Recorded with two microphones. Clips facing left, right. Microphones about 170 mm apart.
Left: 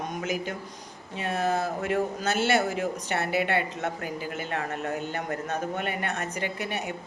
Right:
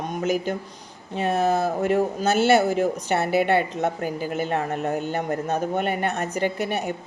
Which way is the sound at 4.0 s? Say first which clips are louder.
Right 7 dB; 40° right (ahead or behind).